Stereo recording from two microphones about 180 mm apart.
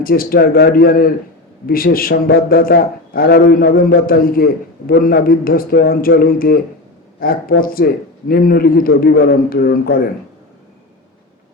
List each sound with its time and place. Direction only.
0.0 s a man's voice: 55° left (ahead or behind)